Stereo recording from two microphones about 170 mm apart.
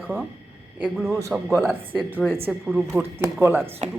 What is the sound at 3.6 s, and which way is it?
Speech, 35° right (ahead or behind).